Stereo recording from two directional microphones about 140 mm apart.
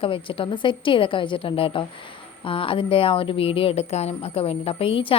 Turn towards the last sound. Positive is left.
turn(degrees=40)  # may be behind; listen again after turning